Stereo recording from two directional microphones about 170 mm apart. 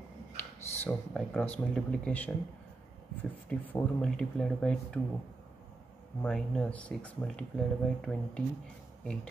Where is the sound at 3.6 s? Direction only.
5° left (ahead or behind).